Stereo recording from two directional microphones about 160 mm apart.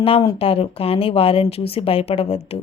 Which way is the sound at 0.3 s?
35° left (ahead or behind).